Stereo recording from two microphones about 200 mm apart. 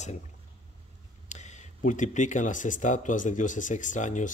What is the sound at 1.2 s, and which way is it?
Speech, 35° left (ahead or behind).